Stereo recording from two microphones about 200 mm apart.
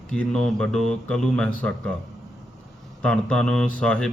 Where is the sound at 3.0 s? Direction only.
5° left (ahead or behind).